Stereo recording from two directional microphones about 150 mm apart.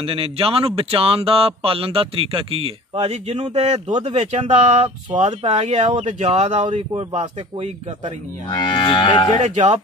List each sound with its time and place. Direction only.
0.0 s speech: 40° right (ahead or behind)
6.9 s speech: 40° right (ahead or behind)
8.5 s moo: 30° left (ahead or behind)
9.4 s speech: 50° right (ahead or behind)